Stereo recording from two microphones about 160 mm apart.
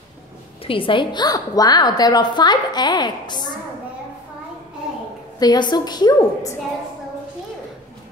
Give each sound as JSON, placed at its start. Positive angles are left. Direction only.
{"t": 0.7, "sound": "a woman's voice", "side_deg": 35}
{"t": 5.4, "sound": "a woman's voice", "side_deg": 25}